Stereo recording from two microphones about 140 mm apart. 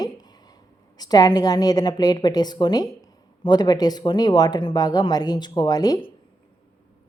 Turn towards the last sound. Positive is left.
turn(degrees=25)  # may be behind; listen again after turning